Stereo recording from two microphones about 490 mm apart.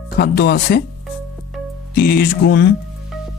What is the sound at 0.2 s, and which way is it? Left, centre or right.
Speech, centre.